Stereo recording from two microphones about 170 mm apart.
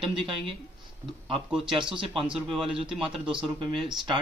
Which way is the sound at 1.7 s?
30° right (ahead or behind).